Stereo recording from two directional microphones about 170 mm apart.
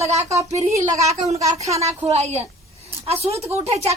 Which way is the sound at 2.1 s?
40° right (ahead or behind).